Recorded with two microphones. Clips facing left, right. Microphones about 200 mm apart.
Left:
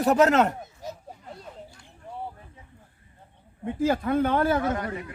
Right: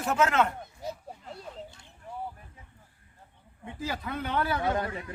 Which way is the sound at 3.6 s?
50° left (ahead or behind).